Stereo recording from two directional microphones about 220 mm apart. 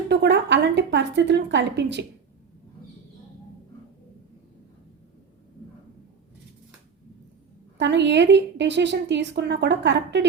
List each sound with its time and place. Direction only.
0.1 s a woman's voice: 50° right (ahead or behind)
7.8 s a woman's voice: 55° right (ahead or behind)